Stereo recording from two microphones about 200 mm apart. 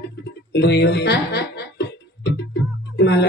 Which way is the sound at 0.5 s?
55° left (ahead or behind).